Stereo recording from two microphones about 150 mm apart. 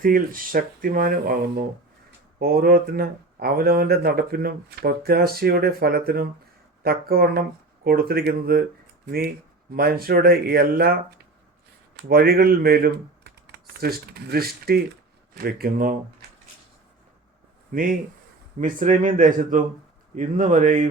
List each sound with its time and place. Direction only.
0.0 s speech: 70° right (ahead or behind)
2.4 s speech: 90° right
12.0 s speech: 80° right
17.7 s speech: 70° right (ahead or behind)